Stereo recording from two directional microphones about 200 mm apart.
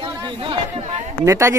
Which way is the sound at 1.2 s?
15° right (ahead or behind).